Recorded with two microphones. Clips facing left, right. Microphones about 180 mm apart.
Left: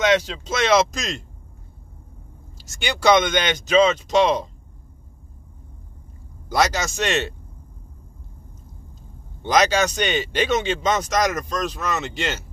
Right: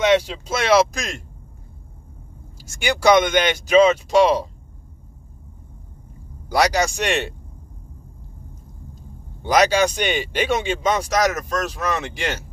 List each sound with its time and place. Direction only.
0.0 s speech: 10° right (ahead or behind)
2.8 s speech: 10° right (ahead or behind)
6.5 s speech: 15° right (ahead or behind)
9.4 s speech: 10° right (ahead or behind)